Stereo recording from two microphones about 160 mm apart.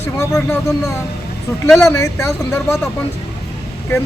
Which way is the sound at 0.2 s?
20° left (ahead or behind).